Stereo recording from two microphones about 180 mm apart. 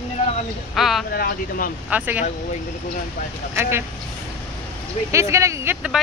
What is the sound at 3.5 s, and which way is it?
Speech, 15° right (ahead or behind).